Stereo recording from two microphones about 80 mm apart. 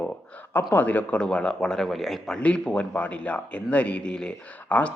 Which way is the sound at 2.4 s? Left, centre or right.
Centre.